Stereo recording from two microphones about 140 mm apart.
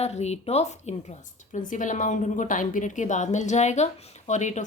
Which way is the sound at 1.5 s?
65° left (ahead or behind).